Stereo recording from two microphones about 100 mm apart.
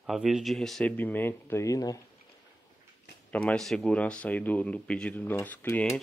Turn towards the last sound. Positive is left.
turn(degrees=20)  # may be behind; listen again after turning